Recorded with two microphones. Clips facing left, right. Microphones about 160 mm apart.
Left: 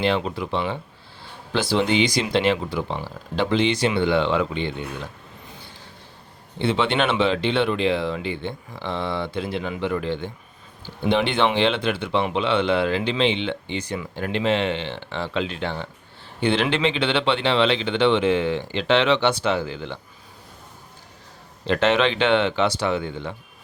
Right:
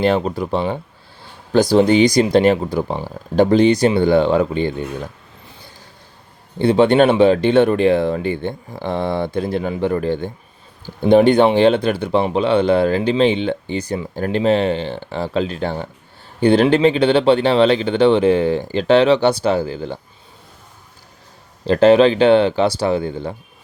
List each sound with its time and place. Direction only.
0.0 s speech: 45° right (ahead or behind)
6.6 s speech: 40° right (ahead or behind)
21.7 s speech: 35° right (ahead or behind)